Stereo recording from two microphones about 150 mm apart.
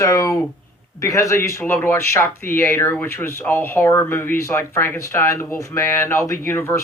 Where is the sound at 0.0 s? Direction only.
20° left (ahead or behind).